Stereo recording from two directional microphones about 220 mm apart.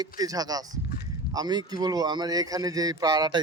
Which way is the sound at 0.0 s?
15° right (ahead or behind).